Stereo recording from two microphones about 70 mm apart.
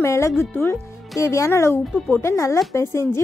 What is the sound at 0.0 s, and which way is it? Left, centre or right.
A woman's voice, left.